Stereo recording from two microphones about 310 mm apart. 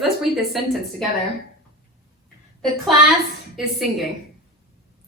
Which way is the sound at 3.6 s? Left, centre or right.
Centre.